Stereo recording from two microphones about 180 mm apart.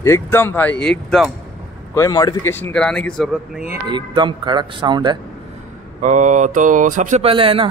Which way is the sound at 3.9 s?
25° right (ahead or behind).